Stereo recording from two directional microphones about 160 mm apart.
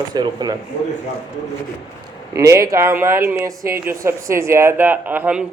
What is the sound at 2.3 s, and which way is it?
Speech, 20° right (ahead or behind).